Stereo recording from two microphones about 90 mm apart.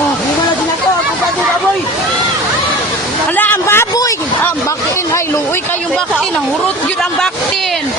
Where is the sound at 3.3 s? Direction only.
20° left (ahead or behind).